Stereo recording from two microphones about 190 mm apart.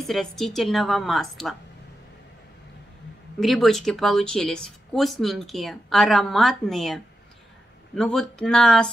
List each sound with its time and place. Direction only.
0.0 s speech: centre (ahead or behind)
3.3 s speech: centre (ahead or behind)